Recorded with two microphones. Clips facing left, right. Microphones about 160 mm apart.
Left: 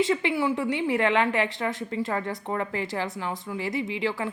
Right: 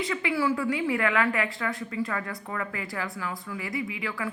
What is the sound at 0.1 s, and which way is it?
Speech, 25° left (ahead or behind).